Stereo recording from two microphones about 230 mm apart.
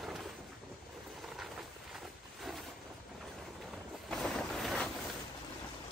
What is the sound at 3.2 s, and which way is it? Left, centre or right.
Boat, centre.